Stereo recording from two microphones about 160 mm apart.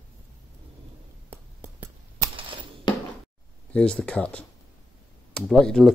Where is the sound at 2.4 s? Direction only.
35° right (ahead or behind).